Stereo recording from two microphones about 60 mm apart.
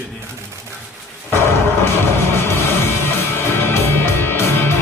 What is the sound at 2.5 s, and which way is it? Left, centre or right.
Music, left.